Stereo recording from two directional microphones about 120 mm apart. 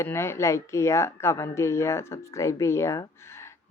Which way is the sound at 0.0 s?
20° left (ahead or behind).